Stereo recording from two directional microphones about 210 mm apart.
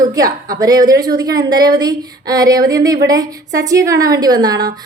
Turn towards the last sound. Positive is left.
turn(degrees=-20)  # may be behind; listen again after turning